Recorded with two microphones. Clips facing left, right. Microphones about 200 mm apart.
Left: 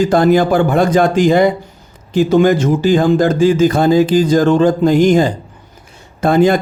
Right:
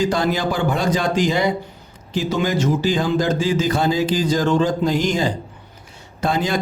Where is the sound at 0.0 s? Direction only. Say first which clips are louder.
Left 9 dB; 55° left (ahead or behind).